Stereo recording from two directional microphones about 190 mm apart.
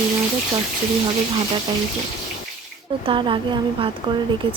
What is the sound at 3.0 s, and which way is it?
Speech, 25° right (ahead or behind).